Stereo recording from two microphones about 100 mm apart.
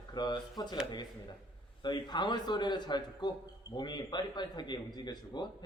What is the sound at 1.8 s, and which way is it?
A man's voice, 50° left (ahead or behind).